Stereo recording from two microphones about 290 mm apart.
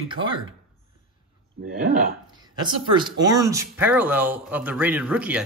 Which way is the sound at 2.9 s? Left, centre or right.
Centre.